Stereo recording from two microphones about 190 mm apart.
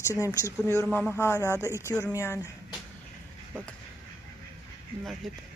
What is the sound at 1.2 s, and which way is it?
Speech, 15° left (ahead or behind).